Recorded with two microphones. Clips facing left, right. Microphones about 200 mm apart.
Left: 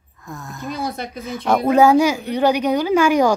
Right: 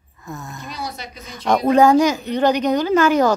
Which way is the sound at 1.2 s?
5° left (ahead or behind).